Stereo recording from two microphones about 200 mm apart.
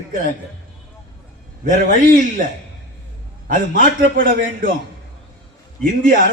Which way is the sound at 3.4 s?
45° right (ahead or behind).